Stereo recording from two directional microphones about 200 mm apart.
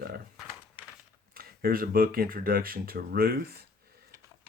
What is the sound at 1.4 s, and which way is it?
Speech, 45° right (ahead or behind).